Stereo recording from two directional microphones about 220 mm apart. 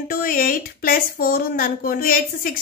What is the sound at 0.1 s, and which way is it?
Speech, 40° left (ahead or behind).